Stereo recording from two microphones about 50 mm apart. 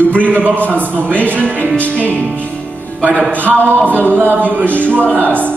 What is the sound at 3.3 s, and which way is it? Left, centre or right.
A capella, right.